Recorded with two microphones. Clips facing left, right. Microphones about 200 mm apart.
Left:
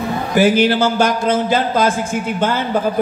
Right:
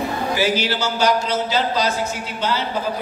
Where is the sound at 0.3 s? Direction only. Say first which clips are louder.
Left 9 dB; 50° left (ahead or behind).